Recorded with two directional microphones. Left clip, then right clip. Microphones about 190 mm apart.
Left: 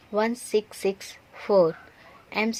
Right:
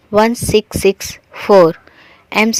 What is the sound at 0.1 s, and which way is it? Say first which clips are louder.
Speech: right 13 dB; 45° right (ahead or behind).